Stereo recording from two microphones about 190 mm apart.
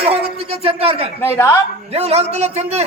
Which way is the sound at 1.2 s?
15° left (ahead or behind).